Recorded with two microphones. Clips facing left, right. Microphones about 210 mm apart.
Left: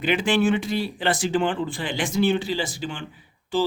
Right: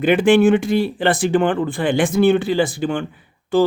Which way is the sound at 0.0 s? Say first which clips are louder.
Right 8 dB; 55° right (ahead or behind).